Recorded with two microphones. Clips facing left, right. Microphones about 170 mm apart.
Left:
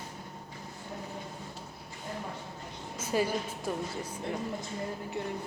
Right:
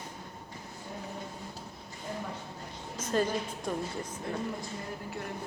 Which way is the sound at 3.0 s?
10° left (ahead or behind).